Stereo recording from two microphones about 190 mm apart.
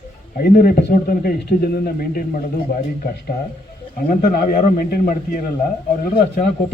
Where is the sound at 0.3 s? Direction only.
50° left (ahead or behind).